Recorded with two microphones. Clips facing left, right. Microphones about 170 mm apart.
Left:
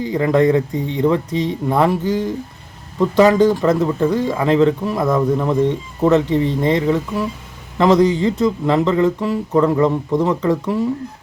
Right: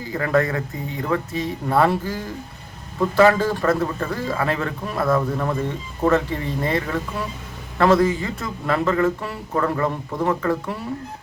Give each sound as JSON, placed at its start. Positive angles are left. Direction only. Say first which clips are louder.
{"t": 0.0, "sound": "speech", "louder": "left 6 dB", "side_deg": 20}